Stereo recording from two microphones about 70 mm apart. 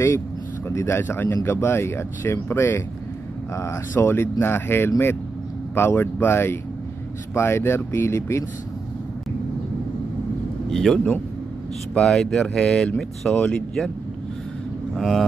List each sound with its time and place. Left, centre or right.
0.7 s speech: left
3.9 s speech: left
10.7 s speech: centre
12.0 s speech: centre
13.3 s speech: left
15.0 s speech: centre